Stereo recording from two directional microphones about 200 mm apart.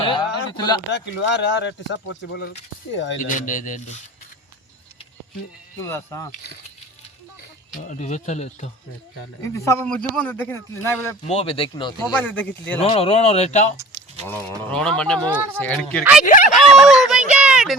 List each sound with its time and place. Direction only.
0.0 s a sound: 25° left (ahead or behind)
0.5 s speech: 20° left (ahead or behind)
0.9 s speech: 60° left (ahead or behind)
3.2 s speech: 40° left (ahead or behind)
5.8 s speech: 10° left (ahead or behind)
7.7 s speech: 40° left (ahead or behind)
9.4 s speech: 15° left (ahead or behind)
11.3 s speech: 30° left (ahead or behind)
12.1 s speech: 10° left (ahead or behind)
12.8 s speech: 30° left (ahead or behind)
14.6 s speech: 5° left (ahead or behind)
16.2 s a sound: 40° left (ahead or behind)
16.6 s a sound: centre (ahead or behind)